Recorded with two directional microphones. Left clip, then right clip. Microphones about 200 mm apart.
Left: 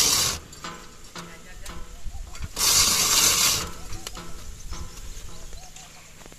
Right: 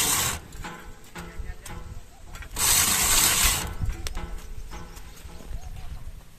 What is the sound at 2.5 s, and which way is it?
Mechanisms, centre (ahead or behind).